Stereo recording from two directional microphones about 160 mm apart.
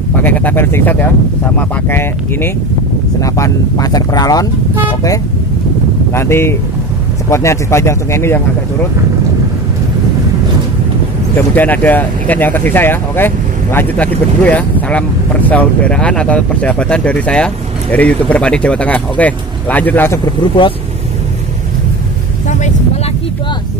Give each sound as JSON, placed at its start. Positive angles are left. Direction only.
{"t": 0.1, "sound": "speech", "side_deg": 10}
{"t": 6.1, "sound": "speech", "side_deg": 15}
{"t": 11.5, "sound": "speech", "side_deg": 10}